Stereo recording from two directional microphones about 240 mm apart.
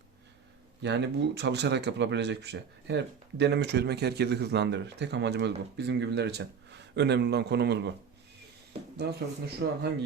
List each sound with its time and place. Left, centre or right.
0.8 s speech: right
9.0 s speech: right